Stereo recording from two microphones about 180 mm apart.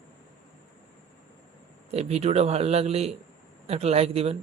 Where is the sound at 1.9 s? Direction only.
35° right (ahead or behind).